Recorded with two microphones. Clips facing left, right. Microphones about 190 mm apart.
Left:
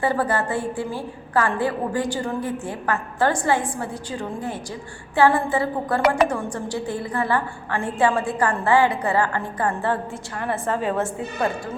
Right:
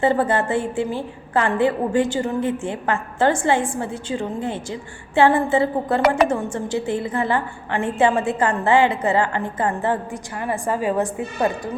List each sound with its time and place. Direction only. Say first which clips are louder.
0.0 s a woman's voice: right 3 dB; 25° right (ahead or behind)